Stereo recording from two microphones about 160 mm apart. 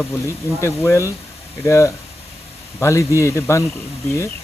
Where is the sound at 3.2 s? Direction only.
20° left (ahead or behind).